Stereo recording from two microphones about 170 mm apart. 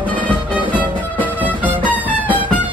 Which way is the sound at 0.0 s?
10° left (ahead or behind).